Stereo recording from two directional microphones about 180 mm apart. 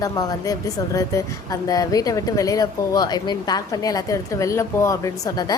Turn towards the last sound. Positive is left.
turn(degrees=20)  # may be behind; listen again after turning